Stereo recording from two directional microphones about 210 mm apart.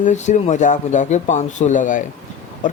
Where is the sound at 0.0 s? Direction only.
35° left (ahead or behind).